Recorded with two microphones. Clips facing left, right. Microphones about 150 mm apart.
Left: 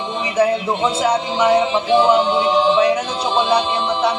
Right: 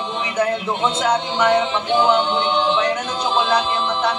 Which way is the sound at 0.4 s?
10° left (ahead or behind).